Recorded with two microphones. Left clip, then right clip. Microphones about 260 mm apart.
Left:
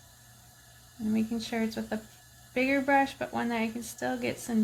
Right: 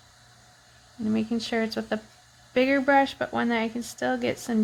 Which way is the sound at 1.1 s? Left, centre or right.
Right.